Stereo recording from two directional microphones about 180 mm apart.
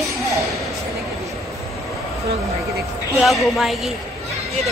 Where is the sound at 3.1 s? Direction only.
Centre (ahead or behind).